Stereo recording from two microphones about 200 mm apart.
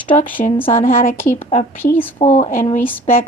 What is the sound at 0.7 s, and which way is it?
A woman's voice, 40° left (ahead or behind).